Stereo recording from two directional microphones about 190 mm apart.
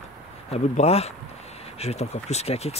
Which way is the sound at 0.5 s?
30° left (ahead or behind).